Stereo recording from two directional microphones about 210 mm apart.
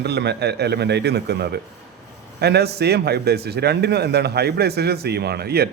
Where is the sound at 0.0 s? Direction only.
55° right (ahead or behind).